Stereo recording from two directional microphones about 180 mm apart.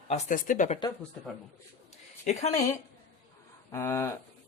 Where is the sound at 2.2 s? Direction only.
40° left (ahead or behind).